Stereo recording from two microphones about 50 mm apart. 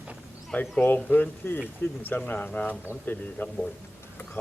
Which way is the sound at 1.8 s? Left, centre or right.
Left.